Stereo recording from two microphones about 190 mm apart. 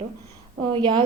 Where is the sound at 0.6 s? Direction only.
25° right (ahead or behind).